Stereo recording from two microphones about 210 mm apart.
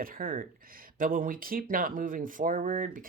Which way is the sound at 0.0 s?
40° right (ahead or behind).